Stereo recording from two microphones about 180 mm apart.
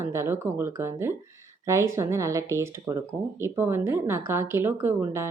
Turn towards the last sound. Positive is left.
turn(degrees=-15)  # may be behind; listen again after turning